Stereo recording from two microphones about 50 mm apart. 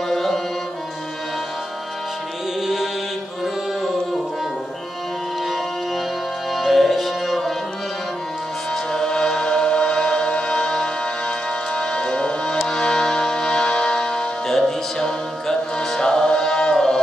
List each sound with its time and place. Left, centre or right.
0.1 s music: centre
2.6 s music: centre
6.5 s music: centre
8.9 s chant: centre
12.6 s music: centre